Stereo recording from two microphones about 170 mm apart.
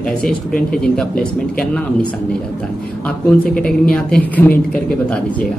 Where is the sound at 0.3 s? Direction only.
55° left (ahead or behind).